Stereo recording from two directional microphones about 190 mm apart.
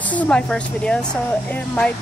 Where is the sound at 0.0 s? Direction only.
10° left (ahead or behind).